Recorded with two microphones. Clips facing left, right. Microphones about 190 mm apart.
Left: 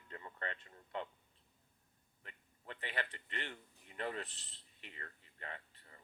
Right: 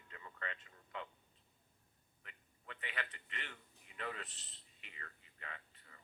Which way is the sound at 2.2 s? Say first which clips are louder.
Left 3 dB; 35° left (ahead or behind).